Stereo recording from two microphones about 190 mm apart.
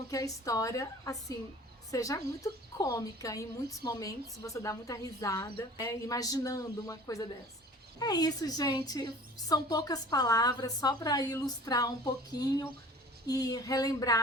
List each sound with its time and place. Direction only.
0.1 s a woman's voice: 20° left (ahead or behind)